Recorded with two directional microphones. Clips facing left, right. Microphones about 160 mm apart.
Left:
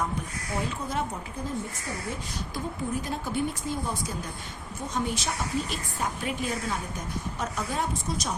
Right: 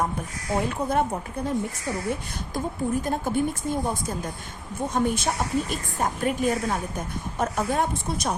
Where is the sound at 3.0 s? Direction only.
50° right (ahead or behind).